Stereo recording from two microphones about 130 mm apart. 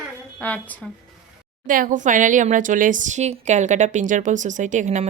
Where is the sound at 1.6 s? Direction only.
90° right; by 5.1 s 65° right (ahead or behind).